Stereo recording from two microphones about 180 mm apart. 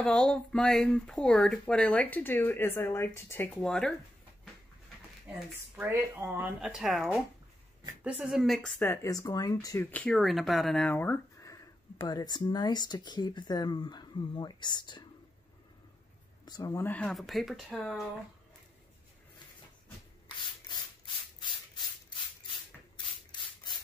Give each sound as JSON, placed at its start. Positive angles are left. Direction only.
{"t": 0.0, "sound": "speech", "side_deg": 5}
{"t": 5.8, "sound": "speech", "side_deg": -10}
{"t": 16.4, "sound": "speech", "side_deg": 20}
{"t": 20.6, "sound": "rub", "side_deg": 25}
{"t": 22.9, "sound": "rub", "side_deg": 25}